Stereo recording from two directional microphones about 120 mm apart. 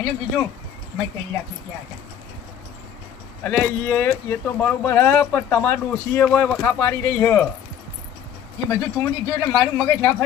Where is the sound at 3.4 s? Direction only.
10° left (ahead or behind).